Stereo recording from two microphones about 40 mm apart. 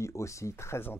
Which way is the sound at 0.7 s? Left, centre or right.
Left.